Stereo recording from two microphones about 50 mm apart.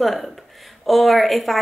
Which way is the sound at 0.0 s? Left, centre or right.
Centre.